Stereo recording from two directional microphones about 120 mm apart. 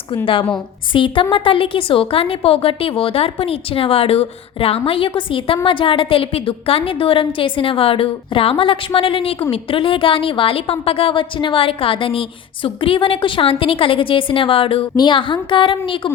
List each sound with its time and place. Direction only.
0.9 s a woman's voice: 45° left (ahead or behind)